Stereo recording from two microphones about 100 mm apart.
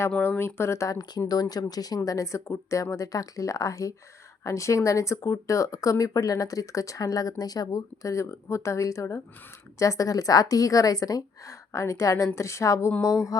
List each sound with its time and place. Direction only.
0.2 s speech: 20° left (ahead or behind)